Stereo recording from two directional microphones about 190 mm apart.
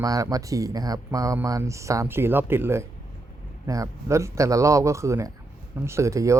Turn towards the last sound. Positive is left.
turn(degrees=-15)  # may be behind; listen again after turning